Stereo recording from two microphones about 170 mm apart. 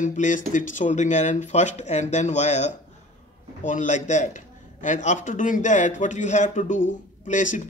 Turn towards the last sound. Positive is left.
turn(degrees=45)  # may be behind; listen again after turning